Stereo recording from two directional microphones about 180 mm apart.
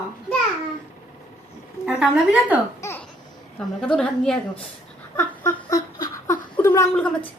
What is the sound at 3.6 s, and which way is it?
Speech, 5° left (ahead or behind).